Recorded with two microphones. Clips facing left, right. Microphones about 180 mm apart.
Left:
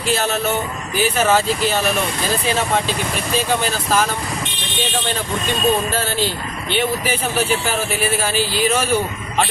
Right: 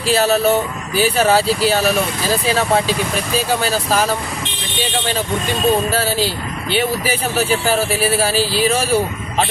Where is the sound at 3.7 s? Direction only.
35° right (ahead or behind).